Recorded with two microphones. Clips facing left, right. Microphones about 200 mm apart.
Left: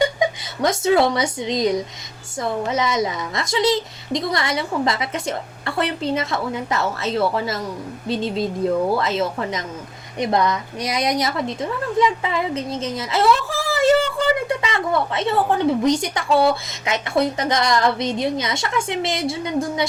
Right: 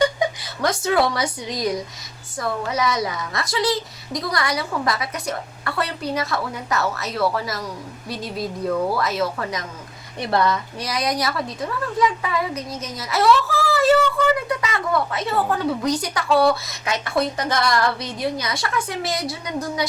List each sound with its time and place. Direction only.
0.0 s a woman's voice: 20° left (ahead or behind)